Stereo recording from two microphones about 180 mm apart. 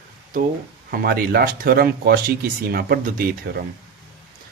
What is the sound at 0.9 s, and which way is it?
Speech, 55° right (ahead or behind).